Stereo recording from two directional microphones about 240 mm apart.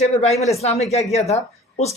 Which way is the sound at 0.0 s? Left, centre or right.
Left.